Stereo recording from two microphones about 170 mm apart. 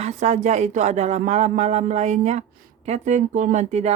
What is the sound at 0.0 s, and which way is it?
Speech, 40° right (ahead or behind).